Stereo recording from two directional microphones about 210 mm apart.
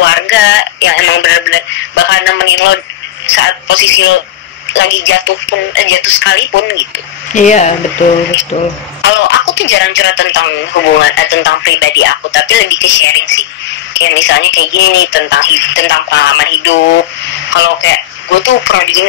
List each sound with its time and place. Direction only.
0.0 s speech: 60° left (ahead or behind)
7.3 s speech: 35° left (ahead or behind)
9.0 s speech: 60° left (ahead or behind)